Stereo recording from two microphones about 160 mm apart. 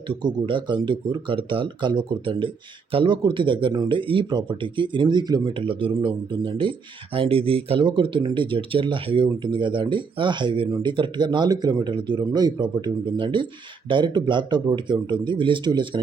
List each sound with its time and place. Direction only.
0.1 s speech: 30° right (ahead or behind)